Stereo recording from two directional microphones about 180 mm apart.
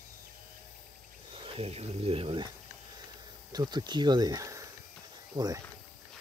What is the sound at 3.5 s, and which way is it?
Speech, 25° right (ahead or behind).